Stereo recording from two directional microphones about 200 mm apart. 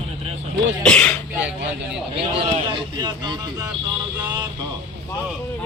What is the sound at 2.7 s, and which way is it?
Speech, 20° right (ahead or behind).